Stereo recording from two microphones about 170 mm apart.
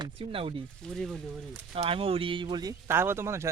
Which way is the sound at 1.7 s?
35° right (ahead or behind).